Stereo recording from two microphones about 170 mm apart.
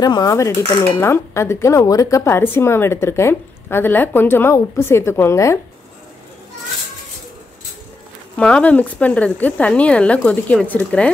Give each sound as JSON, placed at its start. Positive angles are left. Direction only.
{"t": 0.0, "sound": "speech", "side_deg": 20}
{"t": 8.4, "sound": "speech", "side_deg": 5}